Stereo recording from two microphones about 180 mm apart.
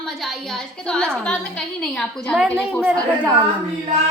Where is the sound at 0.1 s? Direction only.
Centre (ahead or behind).